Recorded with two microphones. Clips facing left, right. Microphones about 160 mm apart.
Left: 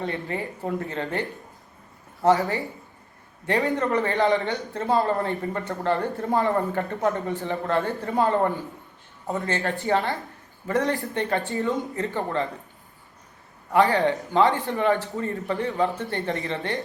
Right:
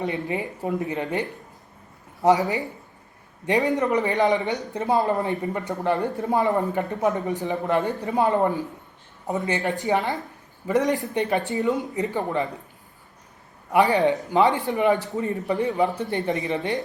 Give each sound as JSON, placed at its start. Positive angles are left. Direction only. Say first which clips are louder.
{"t": 0.0, "sound": "speech", "louder": "right 2 dB", "side_deg": -15}
{"t": 13.7, "sound": "speech", "louder": "right 1 dB", "side_deg": -15}